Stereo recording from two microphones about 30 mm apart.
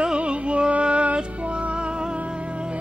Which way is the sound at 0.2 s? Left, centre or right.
Right.